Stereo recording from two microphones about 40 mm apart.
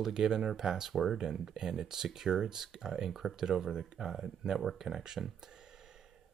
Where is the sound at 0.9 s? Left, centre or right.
Centre.